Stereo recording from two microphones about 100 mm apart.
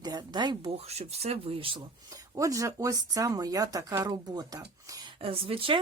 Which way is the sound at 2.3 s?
35° right (ahead or behind).